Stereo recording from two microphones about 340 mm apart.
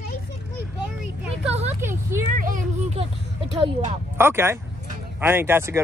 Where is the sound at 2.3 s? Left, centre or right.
Right.